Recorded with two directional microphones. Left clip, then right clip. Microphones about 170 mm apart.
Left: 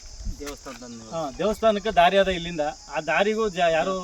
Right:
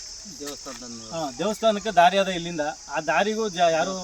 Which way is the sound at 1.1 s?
10° left (ahead or behind).